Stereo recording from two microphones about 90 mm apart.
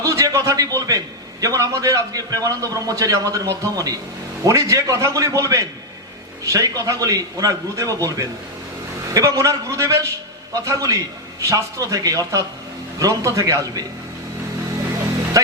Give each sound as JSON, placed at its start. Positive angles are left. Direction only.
{"t": 0.0, "sound": "a man's voice", "side_deg": -35}